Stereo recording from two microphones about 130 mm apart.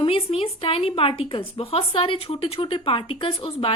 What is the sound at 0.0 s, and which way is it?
A woman's voice, 45° left (ahead or behind).